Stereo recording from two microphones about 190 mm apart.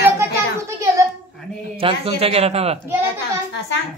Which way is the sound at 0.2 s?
15° right (ahead or behind).